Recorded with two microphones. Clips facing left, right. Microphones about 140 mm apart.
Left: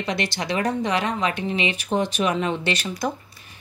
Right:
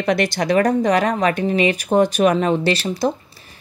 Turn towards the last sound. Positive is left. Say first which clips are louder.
# right 6 dB
turn(degrees=-30)  # may be behind; listen again after turning